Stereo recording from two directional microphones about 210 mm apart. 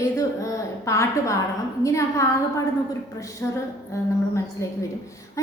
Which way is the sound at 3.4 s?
10° left (ahead or behind).